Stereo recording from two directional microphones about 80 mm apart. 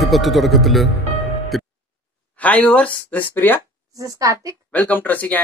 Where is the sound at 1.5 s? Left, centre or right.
Centre.